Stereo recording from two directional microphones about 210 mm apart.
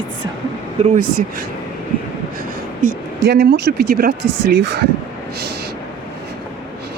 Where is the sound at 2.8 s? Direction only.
45° right (ahead or behind).